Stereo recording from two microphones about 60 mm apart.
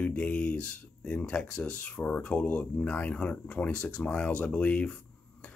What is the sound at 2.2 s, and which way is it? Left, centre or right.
Speech, left.